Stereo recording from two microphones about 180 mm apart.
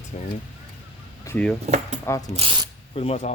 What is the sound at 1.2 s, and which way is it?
Speech, 10° left (ahead or behind).